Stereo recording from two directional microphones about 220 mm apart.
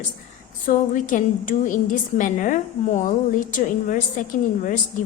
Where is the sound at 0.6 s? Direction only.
35° left (ahead or behind).